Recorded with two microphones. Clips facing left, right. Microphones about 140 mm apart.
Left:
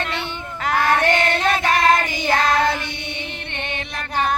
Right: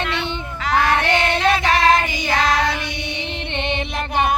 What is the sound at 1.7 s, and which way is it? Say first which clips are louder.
Child singing: right 1 dB; 50° left (ahead or behind).